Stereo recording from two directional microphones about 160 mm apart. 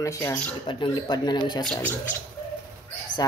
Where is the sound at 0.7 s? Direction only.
30° left (ahead or behind).